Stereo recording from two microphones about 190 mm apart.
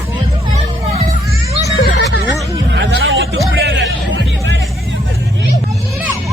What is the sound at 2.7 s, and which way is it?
Hubbub, 70° right (ahead or behind).